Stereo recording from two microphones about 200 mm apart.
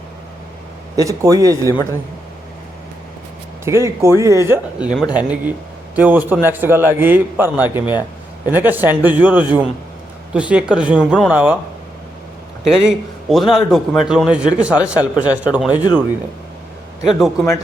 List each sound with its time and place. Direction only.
0.9 s a man's voice: 15° right (ahead or behind)
3.6 s a man's voice: 15° right (ahead or behind)
12.6 s a man's voice: centre (ahead or behind)
17.0 s a man's voice: centre (ahead or behind)